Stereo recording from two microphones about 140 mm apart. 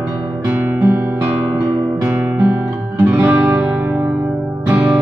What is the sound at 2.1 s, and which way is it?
Music, 15° right (ahead or behind).